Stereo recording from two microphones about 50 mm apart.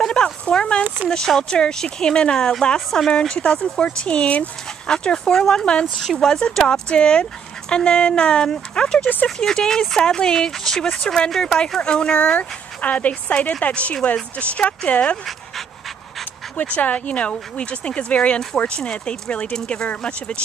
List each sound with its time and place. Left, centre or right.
0.1 s speech: centre
12.4 s speech: left
16.5 s speech: left